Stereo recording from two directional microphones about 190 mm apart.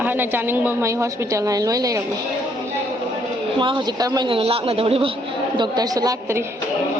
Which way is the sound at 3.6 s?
25° right (ahead or behind).